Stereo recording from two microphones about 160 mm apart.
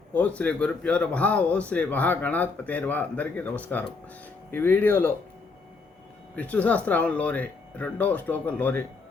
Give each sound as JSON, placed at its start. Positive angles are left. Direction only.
{"t": 0.1, "sound": "a man's voice", "side_deg": 10}
{"t": 6.3, "sound": "a man's voice", "side_deg": 10}